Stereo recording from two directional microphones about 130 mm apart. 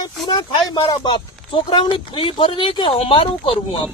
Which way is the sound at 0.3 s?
35° left (ahead or behind).